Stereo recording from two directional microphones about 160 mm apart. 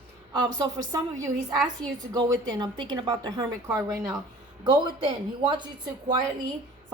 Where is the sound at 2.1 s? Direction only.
25° right (ahead or behind).